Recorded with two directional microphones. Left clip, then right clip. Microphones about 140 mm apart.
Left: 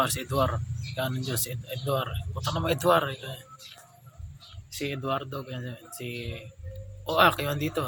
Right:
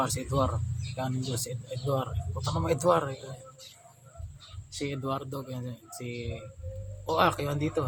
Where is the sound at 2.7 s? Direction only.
20° right (ahead or behind).